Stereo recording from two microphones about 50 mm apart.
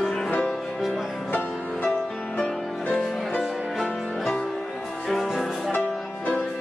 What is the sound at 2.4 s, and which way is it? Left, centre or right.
Music, centre.